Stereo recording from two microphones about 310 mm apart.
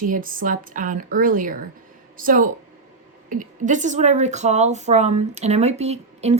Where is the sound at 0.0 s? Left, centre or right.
Right.